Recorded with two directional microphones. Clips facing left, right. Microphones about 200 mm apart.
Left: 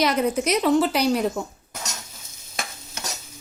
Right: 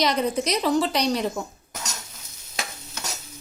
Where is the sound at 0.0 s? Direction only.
5° left (ahead or behind).